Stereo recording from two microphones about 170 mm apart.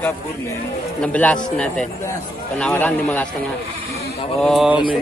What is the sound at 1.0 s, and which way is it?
Speech, 10° left (ahead or behind).